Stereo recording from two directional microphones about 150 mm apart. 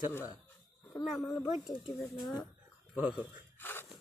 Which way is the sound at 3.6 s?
15° left (ahead or behind).